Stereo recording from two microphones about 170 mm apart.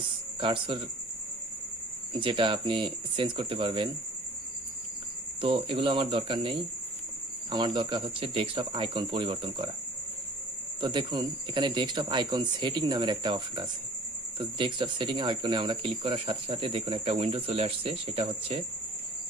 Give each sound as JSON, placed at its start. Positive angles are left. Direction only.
{"t": 0.3, "sound": "speech", "side_deg": -30}
{"t": 2.1, "sound": "speech", "side_deg": -30}
{"t": 5.4, "sound": "speech", "side_deg": -30}
{"t": 7.5, "sound": "speech", "side_deg": -25}
{"t": 10.8, "sound": "speech", "side_deg": -30}